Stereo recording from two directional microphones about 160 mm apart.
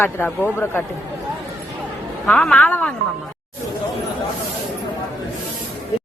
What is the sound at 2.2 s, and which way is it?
Speech, 5° left (ahead or behind).